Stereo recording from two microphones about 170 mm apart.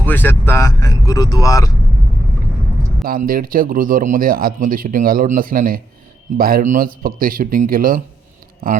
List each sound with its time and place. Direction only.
0.0 s speech: 10° left (ahead or behind)
3.0 s speech: 60° right (ahead or behind)